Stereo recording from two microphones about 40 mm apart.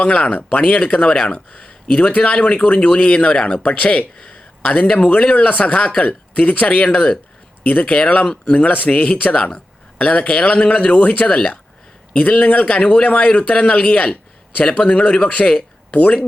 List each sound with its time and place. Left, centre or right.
0.0 s speech: left
0.9 s speech: centre; by 2.7 s left
2.7 s speech: left
6.8 s speech: left
7.6 s speech: left
9.3 s speech: left
10.8 s speech: left
11.3 s speech: left
13.7 s speech: left
15.4 s a sound: left